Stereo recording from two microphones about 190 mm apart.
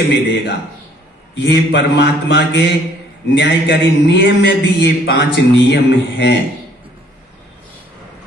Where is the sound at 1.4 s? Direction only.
65° left (ahead or behind).